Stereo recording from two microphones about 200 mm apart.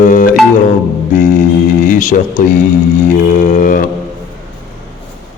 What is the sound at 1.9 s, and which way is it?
Speech, 40° left (ahead or behind).